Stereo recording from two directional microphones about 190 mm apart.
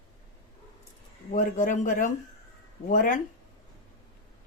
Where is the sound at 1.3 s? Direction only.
45° left (ahead or behind).